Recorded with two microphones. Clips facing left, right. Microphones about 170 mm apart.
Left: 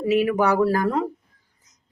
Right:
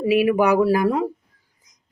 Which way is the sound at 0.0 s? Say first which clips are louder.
Right 2 dB; 10° right (ahead or behind).